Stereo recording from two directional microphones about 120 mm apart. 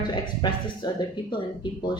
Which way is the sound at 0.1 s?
40° left (ahead or behind).